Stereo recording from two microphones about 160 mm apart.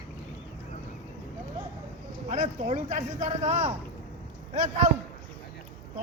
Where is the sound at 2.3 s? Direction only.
50° right (ahead or behind).